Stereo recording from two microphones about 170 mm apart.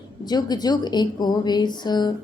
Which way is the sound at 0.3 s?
25° left (ahead or behind).